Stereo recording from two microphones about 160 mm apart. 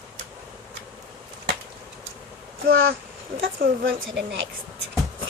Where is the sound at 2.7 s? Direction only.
70° right (ahead or behind).